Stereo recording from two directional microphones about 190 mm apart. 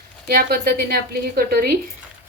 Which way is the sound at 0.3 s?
55° right (ahead or behind).